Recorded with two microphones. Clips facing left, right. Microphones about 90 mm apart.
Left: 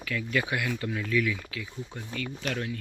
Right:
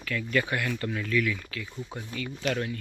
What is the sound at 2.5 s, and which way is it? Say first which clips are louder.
Speech: right 4 dB; centre (ahead or behind).